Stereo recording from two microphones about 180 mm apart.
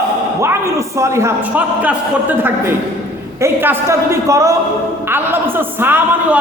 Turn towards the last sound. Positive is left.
turn(degrees=-10)  # may be behind; listen again after turning